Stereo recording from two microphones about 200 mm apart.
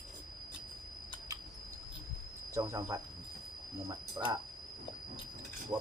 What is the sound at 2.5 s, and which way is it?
Speech, 15° right (ahead or behind).